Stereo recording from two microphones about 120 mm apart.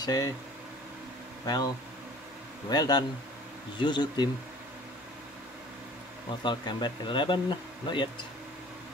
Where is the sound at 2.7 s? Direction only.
35° left (ahead or behind).